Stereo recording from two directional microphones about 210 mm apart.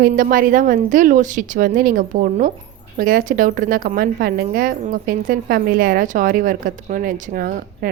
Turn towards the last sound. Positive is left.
turn(degrees=-40)  # may be behind; listen again after turning